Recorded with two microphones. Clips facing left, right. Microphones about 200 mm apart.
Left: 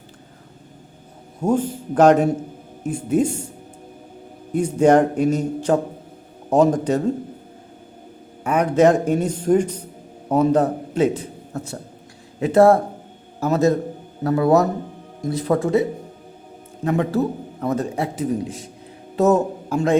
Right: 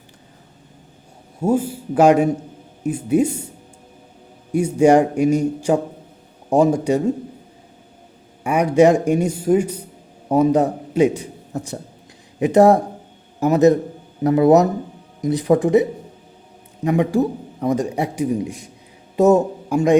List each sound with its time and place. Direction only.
1.4 s a man's voice: 10° right (ahead or behind)
4.5 s a man's voice: 10° right (ahead or behind)
8.4 s a man's voice: 10° right (ahead or behind)